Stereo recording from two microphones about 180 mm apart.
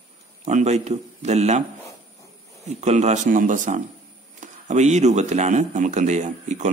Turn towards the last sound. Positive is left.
turn(degrees=-40)  # may be behind; listen again after turning